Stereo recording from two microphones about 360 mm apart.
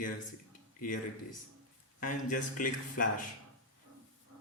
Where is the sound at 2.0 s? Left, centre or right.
Left.